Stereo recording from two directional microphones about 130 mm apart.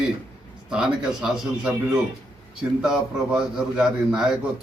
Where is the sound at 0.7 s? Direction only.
5° right (ahead or behind).